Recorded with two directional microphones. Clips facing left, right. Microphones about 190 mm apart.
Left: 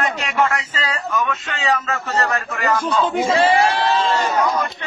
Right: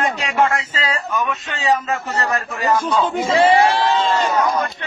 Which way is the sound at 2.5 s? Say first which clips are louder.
Right 2 dB; 15° right (ahead or behind).